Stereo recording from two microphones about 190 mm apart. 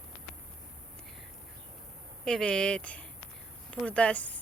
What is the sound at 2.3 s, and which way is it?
A woman's voice, 5° left (ahead or behind).